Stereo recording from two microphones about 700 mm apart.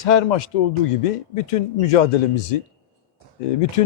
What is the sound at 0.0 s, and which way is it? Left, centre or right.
Speech, left.